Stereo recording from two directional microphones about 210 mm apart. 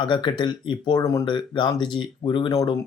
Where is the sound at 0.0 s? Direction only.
20° left (ahead or behind).